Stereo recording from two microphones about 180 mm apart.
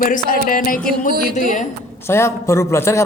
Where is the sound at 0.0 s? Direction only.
50° left (ahead or behind).